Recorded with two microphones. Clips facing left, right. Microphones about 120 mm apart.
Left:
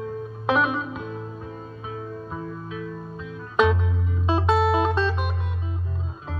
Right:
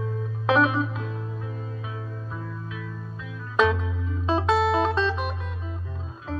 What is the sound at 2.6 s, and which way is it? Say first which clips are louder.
Music: left 4 dB; 40° left (ahead or behind).